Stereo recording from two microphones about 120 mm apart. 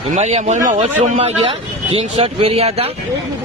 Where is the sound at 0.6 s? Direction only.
60° right (ahead or behind).